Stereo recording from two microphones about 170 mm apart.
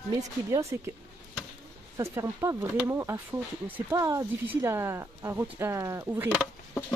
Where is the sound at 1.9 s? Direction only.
20° right (ahead or behind).